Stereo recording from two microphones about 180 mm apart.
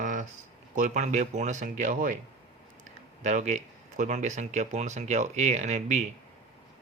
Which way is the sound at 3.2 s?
40° right (ahead or behind).